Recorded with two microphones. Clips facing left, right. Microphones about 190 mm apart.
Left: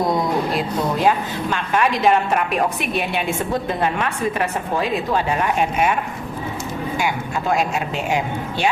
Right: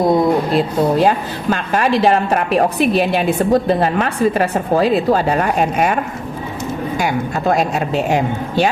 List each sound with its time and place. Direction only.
0.1 s a woman's voice: 30° right (ahead or behind)